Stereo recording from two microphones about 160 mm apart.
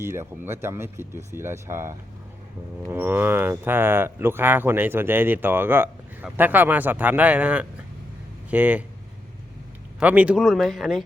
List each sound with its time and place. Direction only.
0.0 s speech: 15° right (ahead or behind)
10.0 s speech: 10° right (ahead or behind)